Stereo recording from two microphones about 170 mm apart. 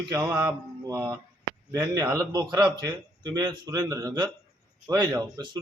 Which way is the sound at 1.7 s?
15° right (ahead or behind).